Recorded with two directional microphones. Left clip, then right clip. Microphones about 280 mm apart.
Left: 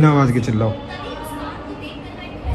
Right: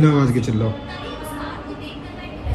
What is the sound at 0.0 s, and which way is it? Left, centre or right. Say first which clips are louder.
Speech: left 2 dB; centre.